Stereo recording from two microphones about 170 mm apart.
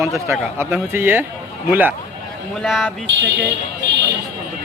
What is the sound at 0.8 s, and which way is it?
A man's voice, 15° right (ahead or behind).